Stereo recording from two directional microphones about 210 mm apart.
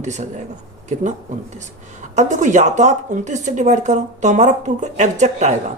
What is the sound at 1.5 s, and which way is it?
Speech, 35° right (ahead or behind).